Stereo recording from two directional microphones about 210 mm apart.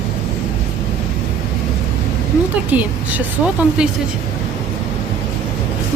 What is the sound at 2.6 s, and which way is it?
Speech, 5° right (ahead or behind).